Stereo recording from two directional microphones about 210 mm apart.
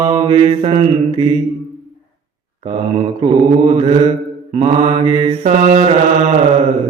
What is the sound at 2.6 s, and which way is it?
Mantra, 25° right (ahead or behind).